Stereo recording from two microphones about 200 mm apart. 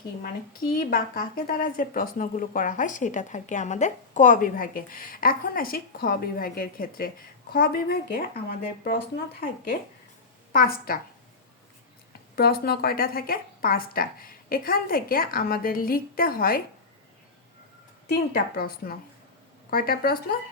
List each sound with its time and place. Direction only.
0.7 s speech: 50° left (ahead or behind)
10.5 s speech: 50° left (ahead or behind)
12.4 s speech: 50° left (ahead or behind)
18.1 s speech: 50° left (ahead or behind)